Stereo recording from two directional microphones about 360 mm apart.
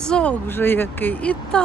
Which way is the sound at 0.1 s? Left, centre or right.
Centre.